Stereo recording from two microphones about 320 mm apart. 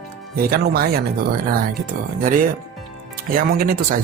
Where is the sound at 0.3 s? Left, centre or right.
Right.